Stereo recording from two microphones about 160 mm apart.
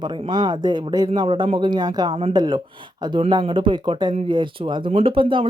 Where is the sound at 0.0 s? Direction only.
30° right (ahead or behind).